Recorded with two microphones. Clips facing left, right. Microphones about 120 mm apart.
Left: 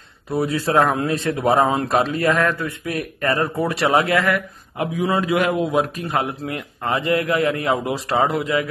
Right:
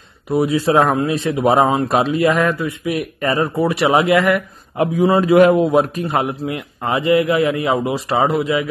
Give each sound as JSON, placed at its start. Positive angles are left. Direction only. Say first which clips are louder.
{"t": 0.3, "sound": "a man's voice", "louder": "right 5 dB", "side_deg": -15}
{"t": 4.7, "sound": "a man's voice", "louder": "right 6 dB", "side_deg": -30}
{"t": 6.0, "sound": "a man's voice", "louder": "right 4 dB", "side_deg": -20}